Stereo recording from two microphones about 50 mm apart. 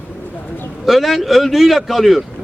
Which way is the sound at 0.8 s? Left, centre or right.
Centre.